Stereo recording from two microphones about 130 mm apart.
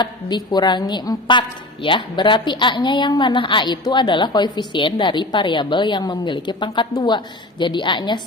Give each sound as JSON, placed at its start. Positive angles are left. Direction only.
{"t": 0.0, "sound": "a woman's voice", "side_deg": 35}